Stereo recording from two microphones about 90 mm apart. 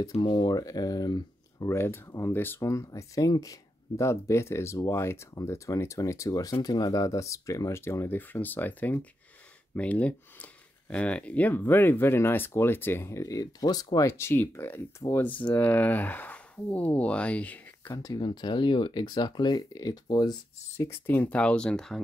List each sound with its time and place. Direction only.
0.2 s speech: 55° left (ahead or behind)
1.7 s speech: 30° left (ahead or behind)
14.1 s speech: 25° left (ahead or behind)
15.2 s speech: 15° left (ahead or behind)
17.9 s speech: 45° left (ahead or behind)
20.7 s speech: 30° left (ahead or behind); by 22.0 s 5° left (ahead or behind)